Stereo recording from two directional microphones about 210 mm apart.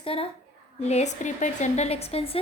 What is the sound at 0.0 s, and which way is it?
A woman's voice, 25° left (ahead or behind).